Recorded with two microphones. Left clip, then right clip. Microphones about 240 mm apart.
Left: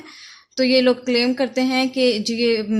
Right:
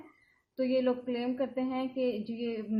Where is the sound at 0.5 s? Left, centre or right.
Left.